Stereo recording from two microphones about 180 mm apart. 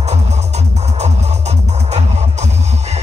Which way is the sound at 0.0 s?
40° right (ahead or behind).